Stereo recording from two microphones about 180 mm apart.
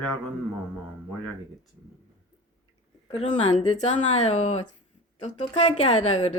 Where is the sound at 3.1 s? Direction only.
35° left (ahead or behind).